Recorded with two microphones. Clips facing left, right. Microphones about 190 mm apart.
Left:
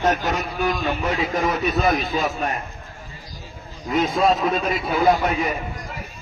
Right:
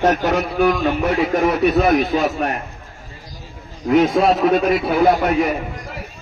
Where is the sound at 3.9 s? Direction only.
65° right (ahead or behind).